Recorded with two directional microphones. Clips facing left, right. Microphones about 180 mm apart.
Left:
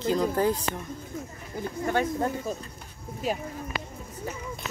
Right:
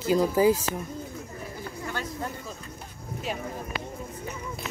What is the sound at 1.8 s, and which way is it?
Speech, 50° left (ahead or behind).